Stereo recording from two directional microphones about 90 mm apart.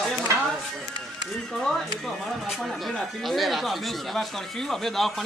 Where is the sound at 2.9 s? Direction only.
Centre (ahead or behind).